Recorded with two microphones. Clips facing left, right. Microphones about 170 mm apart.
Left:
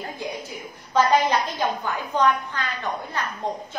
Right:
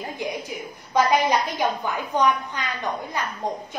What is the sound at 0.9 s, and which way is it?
A woman's voice, 10° right (ahead or behind).